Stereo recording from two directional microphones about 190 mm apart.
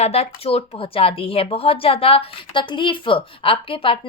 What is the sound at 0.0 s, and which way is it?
Speech, 35° left (ahead or behind).